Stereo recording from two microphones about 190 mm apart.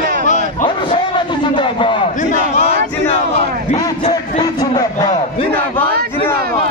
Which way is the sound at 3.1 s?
30° left (ahead or behind).